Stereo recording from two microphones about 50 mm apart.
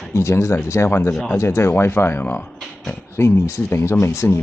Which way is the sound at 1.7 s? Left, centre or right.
Left.